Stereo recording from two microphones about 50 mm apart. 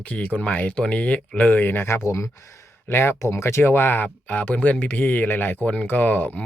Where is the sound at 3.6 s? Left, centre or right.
Left.